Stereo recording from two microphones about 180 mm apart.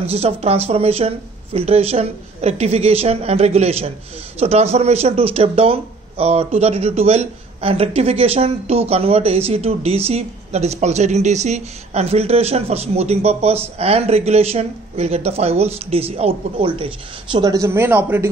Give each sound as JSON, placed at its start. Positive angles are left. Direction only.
{"t": 0.0, "sound": "speech", "side_deg": -35}